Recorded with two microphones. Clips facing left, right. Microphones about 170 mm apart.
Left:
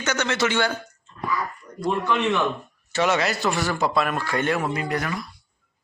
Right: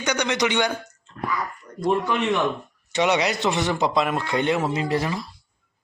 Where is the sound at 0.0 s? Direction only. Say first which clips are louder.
Right 1 dB; 15° right (ahead or behind).